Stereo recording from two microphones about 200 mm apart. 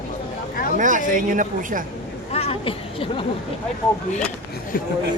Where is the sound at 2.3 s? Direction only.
30° left (ahead or behind).